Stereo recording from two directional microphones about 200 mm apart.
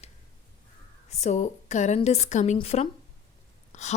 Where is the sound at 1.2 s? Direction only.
35° left (ahead or behind).